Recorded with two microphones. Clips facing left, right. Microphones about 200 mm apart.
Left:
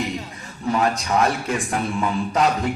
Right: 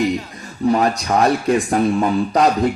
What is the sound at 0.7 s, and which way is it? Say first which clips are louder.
Speech: right 3 dB; 35° right (ahead or behind).